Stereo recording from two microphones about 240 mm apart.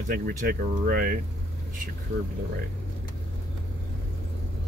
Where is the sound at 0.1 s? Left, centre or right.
Right.